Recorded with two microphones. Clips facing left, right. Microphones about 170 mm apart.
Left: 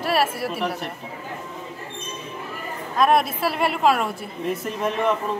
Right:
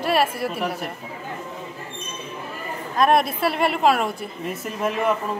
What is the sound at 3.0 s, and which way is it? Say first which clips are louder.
A woman's voice: right 1 dB; centre (ahead or behind).